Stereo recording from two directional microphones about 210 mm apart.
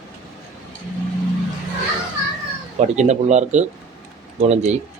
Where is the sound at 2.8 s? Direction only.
35° right (ahead or behind).